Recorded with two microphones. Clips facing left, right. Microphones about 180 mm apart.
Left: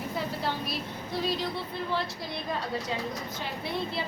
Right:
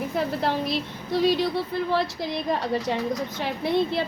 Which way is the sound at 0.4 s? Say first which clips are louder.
Right 7 dB; 85° right.